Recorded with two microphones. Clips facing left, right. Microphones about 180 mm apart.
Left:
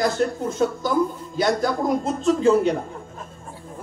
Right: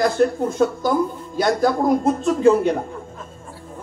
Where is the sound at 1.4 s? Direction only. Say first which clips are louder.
Right 3 dB; 55° right (ahead or behind).